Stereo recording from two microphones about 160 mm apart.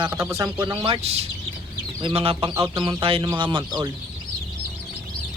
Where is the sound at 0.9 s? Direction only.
40° right (ahead or behind).